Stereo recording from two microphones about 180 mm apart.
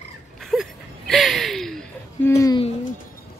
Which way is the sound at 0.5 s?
Centre (ahead or behind).